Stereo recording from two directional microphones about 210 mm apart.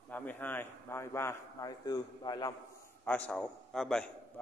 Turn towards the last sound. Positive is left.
turn(degrees=5)  # may be behind; listen again after turning